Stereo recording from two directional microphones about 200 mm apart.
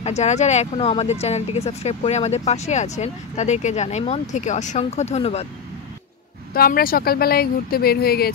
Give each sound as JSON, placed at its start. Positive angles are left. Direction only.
{"t": 0.0, "sound": "speech", "side_deg": 35}
{"t": 6.5, "sound": "speech", "side_deg": 45}